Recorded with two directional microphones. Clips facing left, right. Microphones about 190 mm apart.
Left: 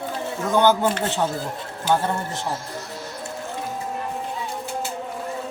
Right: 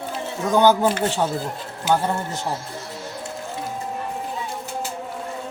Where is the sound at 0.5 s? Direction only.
15° right (ahead or behind).